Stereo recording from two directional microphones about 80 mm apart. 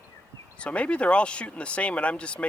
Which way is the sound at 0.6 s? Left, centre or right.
Centre.